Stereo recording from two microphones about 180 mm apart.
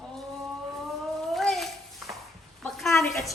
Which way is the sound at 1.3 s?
Centre (ahead or behind).